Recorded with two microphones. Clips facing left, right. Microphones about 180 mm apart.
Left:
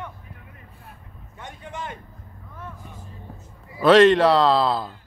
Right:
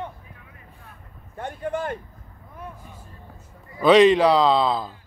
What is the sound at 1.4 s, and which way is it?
Speech, 50° right (ahead or behind).